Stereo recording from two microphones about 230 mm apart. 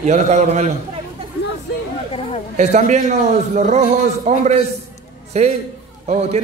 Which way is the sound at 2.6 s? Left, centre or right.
Right.